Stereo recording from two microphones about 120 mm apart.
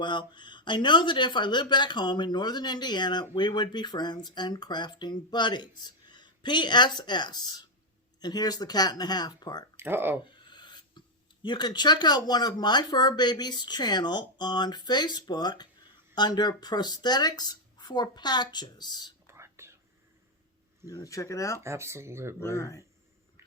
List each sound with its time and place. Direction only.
0.0 s speech: 40° left (ahead or behind)
9.7 s speech: 20° right (ahead or behind)
10.4 s a sound: 40° left (ahead or behind)
11.4 s speech: 40° left (ahead or behind)
19.3 s whispering: 20° right (ahead or behind)
20.8 s speech: 30° left (ahead or behind)
21.6 s speech: 25° right (ahead or behind)
22.4 s speech: 25° left (ahead or behind)
23.4 s a sound: 25° right (ahead or behind)